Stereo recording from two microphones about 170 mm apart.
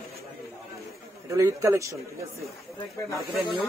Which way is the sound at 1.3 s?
20° right (ahead or behind).